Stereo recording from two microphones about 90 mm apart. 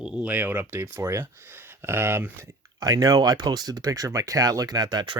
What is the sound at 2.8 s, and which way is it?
Speech, 45° right (ahead or behind).